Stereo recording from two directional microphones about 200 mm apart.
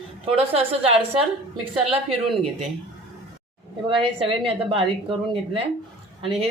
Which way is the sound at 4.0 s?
30° right (ahead or behind).